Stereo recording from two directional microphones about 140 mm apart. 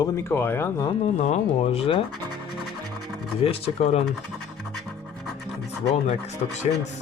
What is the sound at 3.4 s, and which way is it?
Speech, 50° left (ahead or behind).